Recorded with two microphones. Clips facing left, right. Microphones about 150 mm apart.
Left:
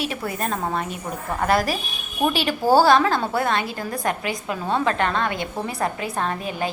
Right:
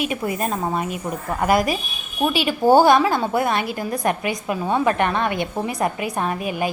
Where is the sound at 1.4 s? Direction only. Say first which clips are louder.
Right 2 dB; 15° right (ahead or behind).